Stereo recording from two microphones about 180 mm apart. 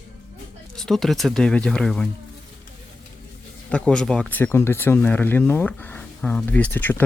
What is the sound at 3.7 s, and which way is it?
Speech, 5° left (ahead or behind).